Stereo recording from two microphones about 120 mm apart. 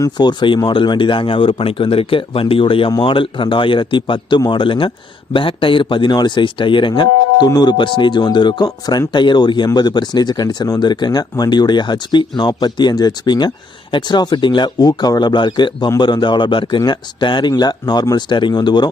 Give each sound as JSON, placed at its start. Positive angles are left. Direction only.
{"t": 0.0, "sound": "speech", "side_deg": 35}